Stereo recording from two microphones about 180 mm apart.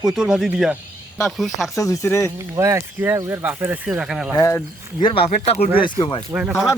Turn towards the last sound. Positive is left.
turn(degrees=-5)  # may be behind; listen again after turning